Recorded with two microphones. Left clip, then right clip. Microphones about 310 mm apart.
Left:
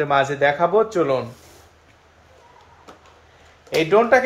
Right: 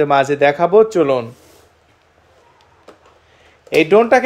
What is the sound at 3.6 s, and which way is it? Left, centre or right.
Speech, right.